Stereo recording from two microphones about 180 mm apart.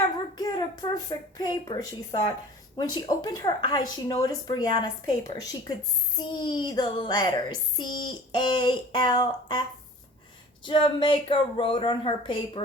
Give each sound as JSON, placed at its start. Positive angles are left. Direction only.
{"t": 0.3, "sound": "a sound", "side_deg": 20}
{"t": 1.4, "sound": "a child's voice", "side_deg": 20}
{"t": 10.7, "sound": "a child's voice", "side_deg": 30}